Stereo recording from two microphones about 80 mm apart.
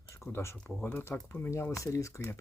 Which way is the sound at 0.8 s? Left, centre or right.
Left.